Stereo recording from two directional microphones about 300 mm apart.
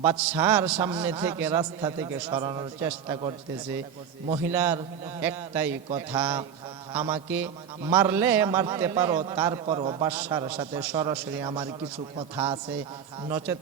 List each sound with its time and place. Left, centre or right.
0.0 s a man's voice: centre
4.5 s a man's voice: centre